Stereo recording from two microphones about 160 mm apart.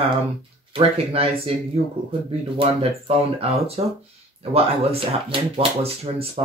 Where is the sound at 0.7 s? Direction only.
40° right (ahead or behind).